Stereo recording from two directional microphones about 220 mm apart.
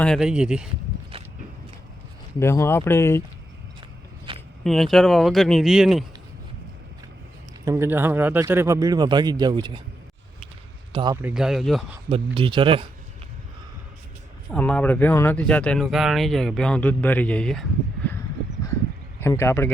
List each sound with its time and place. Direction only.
0.0 s speech: centre (ahead or behind)
2.4 s speech: 10° left (ahead or behind)
4.3 s a sound: 25° right (ahead or behind)
4.6 s speech: centre (ahead or behind)
7.6 s a man's voice: 15° right (ahead or behind)
10.9 s speech: 20° right (ahead or behind)
11.2 s speech: 5° right (ahead or behind)
12.0 s speech: 25° right (ahead or behind)
14.5 s speech: 5° left (ahead or behind)
19.2 s speech: 10° left (ahead or behind)